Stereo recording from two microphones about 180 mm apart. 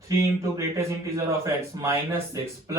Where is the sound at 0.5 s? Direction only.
15° right (ahead or behind).